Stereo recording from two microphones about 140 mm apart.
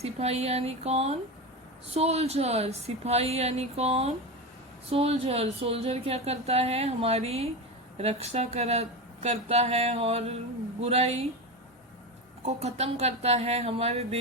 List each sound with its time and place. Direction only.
0.0 s speech: 50° right (ahead or behind)
12.5 s speech: 50° right (ahead or behind)